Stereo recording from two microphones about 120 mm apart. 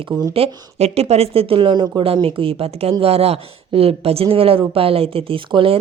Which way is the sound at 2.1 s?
50° right (ahead or behind).